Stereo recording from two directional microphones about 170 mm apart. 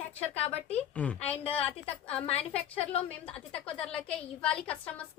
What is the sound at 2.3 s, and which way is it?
Speech, 35° left (ahead or behind).